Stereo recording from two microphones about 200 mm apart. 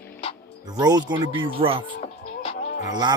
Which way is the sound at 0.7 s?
20° right (ahead or behind).